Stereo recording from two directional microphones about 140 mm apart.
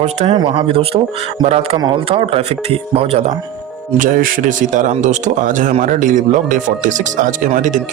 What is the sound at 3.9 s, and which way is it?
Speech, 80° right.